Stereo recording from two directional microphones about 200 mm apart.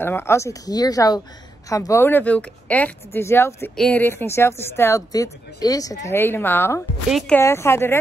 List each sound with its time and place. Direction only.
0.0 s speech: 10° left (ahead or behind)
7.1 s speech: centre (ahead or behind)
7.3 s speech: 15° left (ahead or behind)